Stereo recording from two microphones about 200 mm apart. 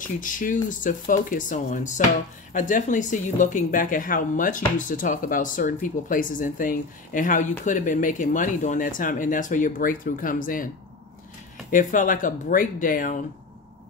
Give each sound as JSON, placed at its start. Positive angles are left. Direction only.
{"t": 0.0, "sound": "a woman's voice", "side_deg": 40}
{"t": 11.7, "sound": "a woman's voice", "side_deg": 40}